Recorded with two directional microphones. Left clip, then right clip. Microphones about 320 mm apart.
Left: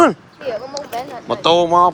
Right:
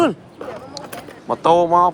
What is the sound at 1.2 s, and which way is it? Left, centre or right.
Speech, centre.